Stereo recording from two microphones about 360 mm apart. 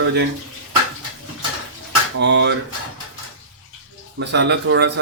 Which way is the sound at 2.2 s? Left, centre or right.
Right.